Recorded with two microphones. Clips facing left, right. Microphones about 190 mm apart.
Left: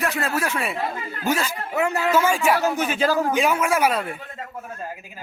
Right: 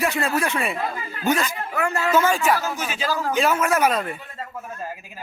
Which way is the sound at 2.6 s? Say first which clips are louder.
Left 6 dB; 60° left (ahead or behind).